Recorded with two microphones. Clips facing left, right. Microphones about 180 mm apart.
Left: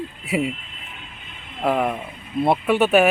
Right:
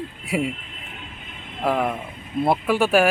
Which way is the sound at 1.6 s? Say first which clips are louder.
Left 1 dB; centre (ahead or behind).